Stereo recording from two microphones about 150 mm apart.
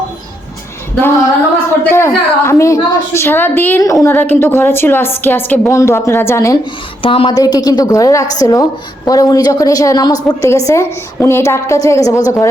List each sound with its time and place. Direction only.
1.8 s a woman's voice: 15° left (ahead or behind)
7.0 s a woman's voice: 35° left (ahead or behind)